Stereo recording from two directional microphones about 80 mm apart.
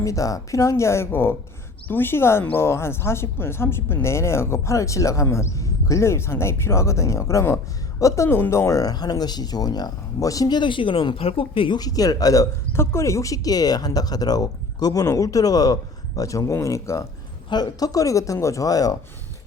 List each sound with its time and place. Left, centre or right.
0.0 s speech: left
8.8 s speech: left
10.5 s speech: left
11.8 s speech: left
12.7 s speech: left
17.5 s speech: left